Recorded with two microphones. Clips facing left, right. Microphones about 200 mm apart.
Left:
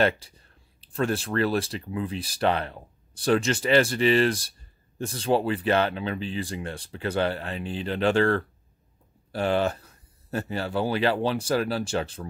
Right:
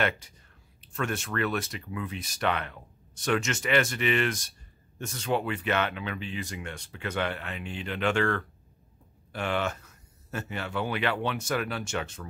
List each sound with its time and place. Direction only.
0.2 s speech: 30° left (ahead or behind)